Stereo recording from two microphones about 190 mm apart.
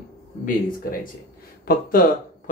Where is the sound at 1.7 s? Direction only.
50° left (ahead or behind).